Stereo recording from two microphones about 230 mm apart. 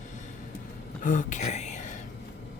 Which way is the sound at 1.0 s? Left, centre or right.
Left.